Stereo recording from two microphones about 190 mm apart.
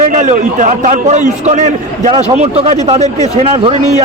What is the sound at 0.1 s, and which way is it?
A man's voice, 40° right (ahead or behind).